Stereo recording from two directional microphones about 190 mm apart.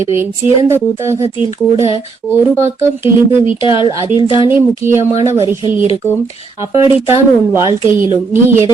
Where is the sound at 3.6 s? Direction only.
25° left (ahead or behind).